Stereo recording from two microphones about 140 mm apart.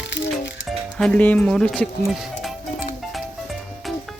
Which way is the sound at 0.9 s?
5° left (ahead or behind).